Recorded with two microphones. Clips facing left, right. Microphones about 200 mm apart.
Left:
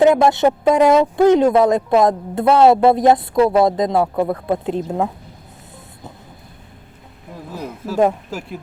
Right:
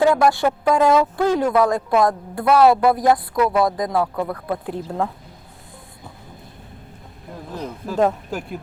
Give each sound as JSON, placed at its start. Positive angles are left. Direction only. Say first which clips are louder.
{"t": 0.0, "sound": "speech", "louder": "left 4 dB", "side_deg": 20}
{"t": 7.5, "sound": "speech", "louder": "left 2 dB", "side_deg": 10}